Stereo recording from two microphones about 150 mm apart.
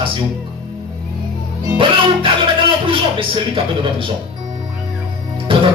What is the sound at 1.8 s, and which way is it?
Music, 35° right (ahead or behind).